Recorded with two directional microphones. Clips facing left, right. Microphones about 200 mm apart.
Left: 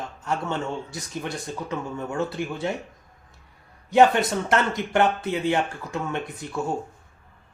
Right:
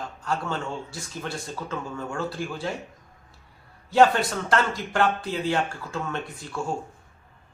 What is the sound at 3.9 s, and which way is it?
Speech, 20° left (ahead or behind).